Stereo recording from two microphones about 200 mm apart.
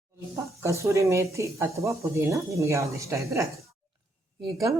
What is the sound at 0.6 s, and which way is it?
Speech, 15° right (ahead or behind).